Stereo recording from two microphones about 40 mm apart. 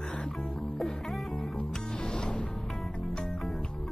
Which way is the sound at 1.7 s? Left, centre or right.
Left.